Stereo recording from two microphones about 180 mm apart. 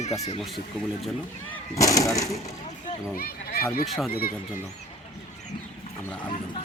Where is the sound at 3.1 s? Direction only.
55° left (ahead or behind).